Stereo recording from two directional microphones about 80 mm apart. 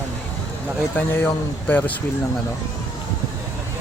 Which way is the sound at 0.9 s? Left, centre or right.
Left.